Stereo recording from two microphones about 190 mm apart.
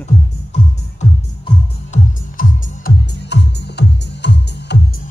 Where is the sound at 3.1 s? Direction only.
65° left (ahead or behind).